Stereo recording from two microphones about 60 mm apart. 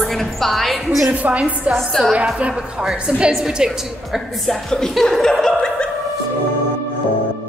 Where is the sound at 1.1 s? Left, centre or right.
Right.